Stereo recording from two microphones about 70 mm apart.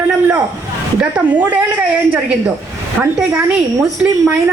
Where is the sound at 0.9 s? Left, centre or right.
Centre.